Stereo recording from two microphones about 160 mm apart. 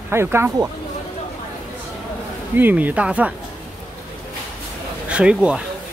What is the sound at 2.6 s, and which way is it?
Speech, 10° right (ahead or behind).